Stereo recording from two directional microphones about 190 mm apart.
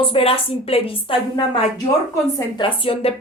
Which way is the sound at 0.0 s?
30° left (ahead or behind).